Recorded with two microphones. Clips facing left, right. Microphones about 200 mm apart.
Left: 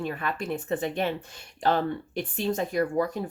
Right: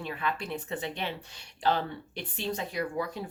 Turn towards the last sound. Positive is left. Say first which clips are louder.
# left 7 dB
turn(degrees=45)  # may be behind; listen again after turning